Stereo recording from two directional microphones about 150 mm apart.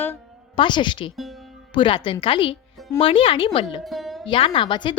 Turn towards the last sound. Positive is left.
turn(degrees=35)  # may be behind; listen again after turning